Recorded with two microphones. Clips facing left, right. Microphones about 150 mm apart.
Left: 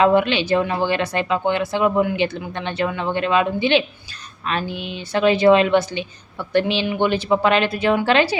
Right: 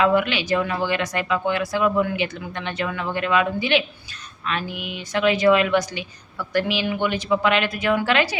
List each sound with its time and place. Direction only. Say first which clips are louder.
0.0 s a woman's voice: left 3 dB; 30° left (ahead or behind)